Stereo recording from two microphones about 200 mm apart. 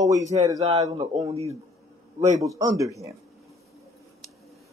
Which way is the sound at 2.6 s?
20° right (ahead or behind).